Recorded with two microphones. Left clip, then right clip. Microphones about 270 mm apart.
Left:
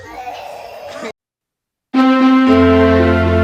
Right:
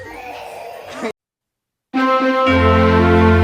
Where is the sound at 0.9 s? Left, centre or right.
Centre.